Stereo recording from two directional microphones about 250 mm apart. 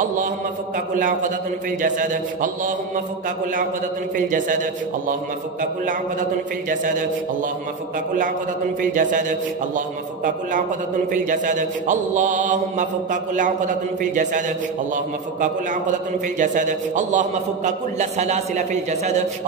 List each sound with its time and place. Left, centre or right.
0.9 s mantra: right
6.7 s mantra: right
8.9 s mantra: right
16.3 s a man's voice: right